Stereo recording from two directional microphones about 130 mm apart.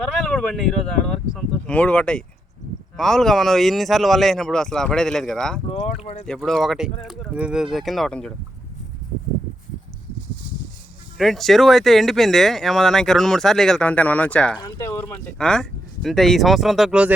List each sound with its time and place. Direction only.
0.3 s speech: 5° left (ahead or behind)
5.6 s speech: 50° left (ahead or behind)
6.2 s speech: 5° left (ahead or behind)
11.2 s speech: centre (ahead or behind)
14.8 s a sound: 20° left (ahead or behind)
15.4 s speech: 5° left (ahead or behind)